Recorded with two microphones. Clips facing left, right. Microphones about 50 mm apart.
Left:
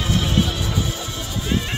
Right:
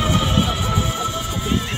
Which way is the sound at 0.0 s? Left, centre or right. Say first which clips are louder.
Right 2 dB; centre.